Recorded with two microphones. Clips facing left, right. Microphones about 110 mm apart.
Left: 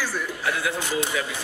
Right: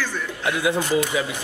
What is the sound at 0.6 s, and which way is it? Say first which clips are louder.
Speech: right 9 dB; 20° right (ahead or behind).